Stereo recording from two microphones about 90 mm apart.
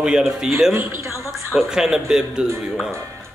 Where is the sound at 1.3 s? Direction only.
5° right (ahead or behind).